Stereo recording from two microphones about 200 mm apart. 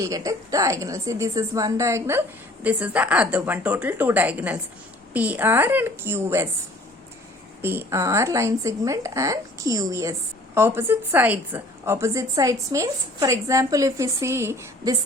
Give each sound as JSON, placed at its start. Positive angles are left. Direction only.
{"t": 0.0, "sound": "a woman's voice", "side_deg": -15}
{"t": 7.6, "sound": "a woman's voice", "side_deg": -10}